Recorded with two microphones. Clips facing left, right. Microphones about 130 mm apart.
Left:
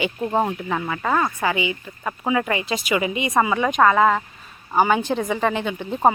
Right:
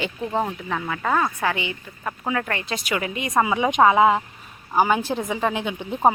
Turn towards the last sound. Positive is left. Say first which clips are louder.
# left 1 dB
turn(degrees=5)  # may be behind; listen again after turning